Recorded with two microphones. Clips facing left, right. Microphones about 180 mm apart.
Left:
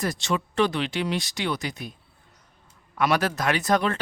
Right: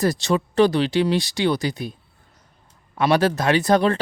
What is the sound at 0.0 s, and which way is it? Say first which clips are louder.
Speech: right 6 dB; 35° right (ahead or behind).